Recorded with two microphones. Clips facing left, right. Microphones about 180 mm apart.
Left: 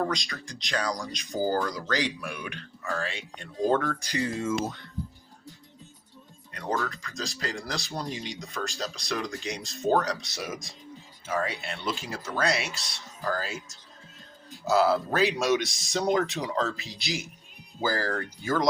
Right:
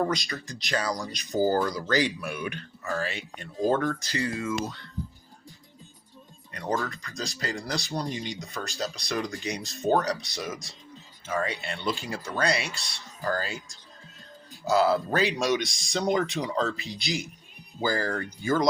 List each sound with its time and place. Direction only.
0.0 s speech: 5° right (ahead or behind)
4.0 s speech: 20° left (ahead or behind)
6.8 s speech: centre (ahead or behind)
10.4 s speech: 15° left (ahead or behind)
11.3 s speech: 5° left (ahead or behind)